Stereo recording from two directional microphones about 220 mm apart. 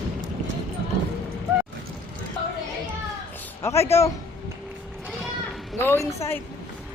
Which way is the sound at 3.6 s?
10° left (ahead or behind).